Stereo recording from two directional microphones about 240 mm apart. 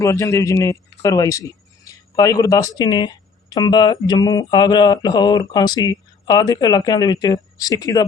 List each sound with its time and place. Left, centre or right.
0.0 s speech: centre